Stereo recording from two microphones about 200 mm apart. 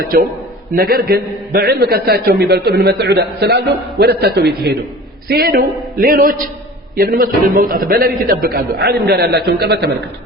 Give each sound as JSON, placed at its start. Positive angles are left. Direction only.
{"t": 0.0, "sound": "a man's voice", "side_deg": -50}